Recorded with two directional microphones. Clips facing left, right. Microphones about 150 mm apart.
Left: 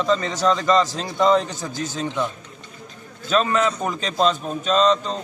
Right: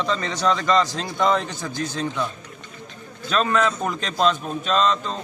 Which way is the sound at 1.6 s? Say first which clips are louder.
Even; 40° left (ahead or behind).